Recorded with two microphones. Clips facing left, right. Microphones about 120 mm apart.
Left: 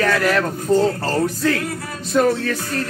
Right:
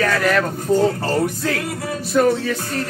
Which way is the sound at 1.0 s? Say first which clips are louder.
Left 1 dB; 15° right (ahead or behind).